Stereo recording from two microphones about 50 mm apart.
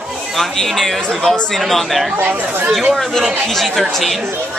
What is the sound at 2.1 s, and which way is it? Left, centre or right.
Speech, right.